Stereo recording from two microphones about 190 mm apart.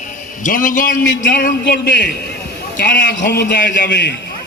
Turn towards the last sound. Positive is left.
turn(degrees=65)  # may be behind; listen again after turning